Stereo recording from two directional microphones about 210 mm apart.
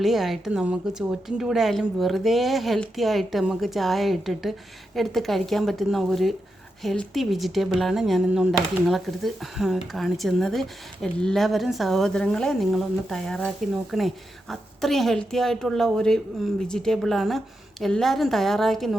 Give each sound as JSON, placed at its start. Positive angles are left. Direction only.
{"t": 0.0, "sound": "speech", "side_deg": 0}